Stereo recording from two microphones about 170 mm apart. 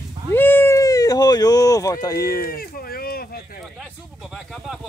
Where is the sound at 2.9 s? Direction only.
60° left (ahead or behind).